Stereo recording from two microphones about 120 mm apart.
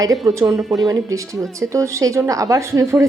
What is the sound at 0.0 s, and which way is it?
Speech, 30° right (ahead or behind).